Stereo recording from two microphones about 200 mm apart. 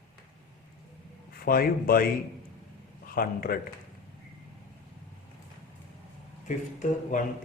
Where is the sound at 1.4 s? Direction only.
45° left (ahead or behind).